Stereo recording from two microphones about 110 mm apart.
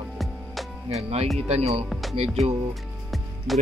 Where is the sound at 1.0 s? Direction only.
70° right (ahead or behind).